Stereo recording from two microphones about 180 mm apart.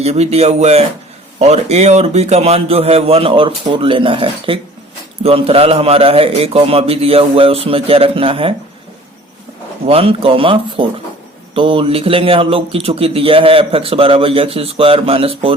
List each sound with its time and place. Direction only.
0.0 s speech: 35° right (ahead or behind)
9.8 s speech: 35° right (ahead or behind)